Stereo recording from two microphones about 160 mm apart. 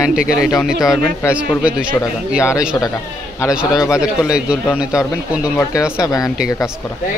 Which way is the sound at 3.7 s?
20° left (ahead or behind).